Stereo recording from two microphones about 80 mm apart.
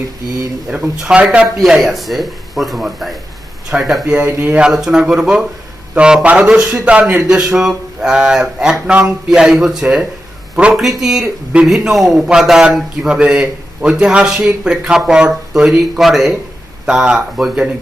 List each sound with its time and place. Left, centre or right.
0.7 s speech: centre
1.6 s speech: centre
4.0 s speech: centre
4.6 s speech: centre